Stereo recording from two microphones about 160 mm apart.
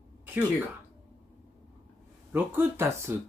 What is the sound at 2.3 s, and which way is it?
Speech, 15° right (ahead or behind).